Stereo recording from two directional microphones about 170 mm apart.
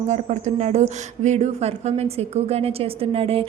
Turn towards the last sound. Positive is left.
turn(degrees=-35)  # may be behind; listen again after turning